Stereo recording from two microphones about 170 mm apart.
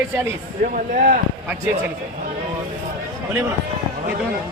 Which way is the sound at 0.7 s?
55° right (ahead or behind).